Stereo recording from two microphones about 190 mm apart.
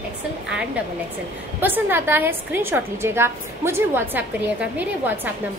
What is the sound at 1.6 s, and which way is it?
A woman's voice, 10° right (ahead or behind).